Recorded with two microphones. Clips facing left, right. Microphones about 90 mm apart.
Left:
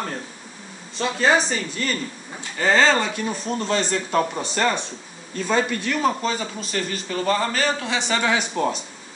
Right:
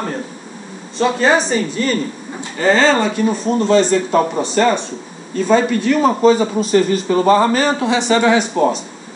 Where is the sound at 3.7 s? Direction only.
Centre (ahead or behind).